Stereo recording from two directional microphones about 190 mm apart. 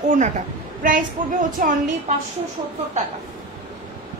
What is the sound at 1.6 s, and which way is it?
Speech, 45° right (ahead or behind).